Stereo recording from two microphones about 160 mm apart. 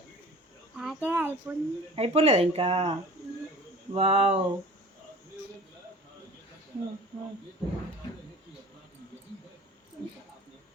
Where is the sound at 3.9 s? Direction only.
40° right (ahead or behind).